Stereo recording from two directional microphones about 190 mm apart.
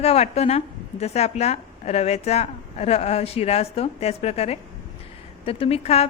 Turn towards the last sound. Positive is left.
turn(degrees=35)  # may be behind; listen again after turning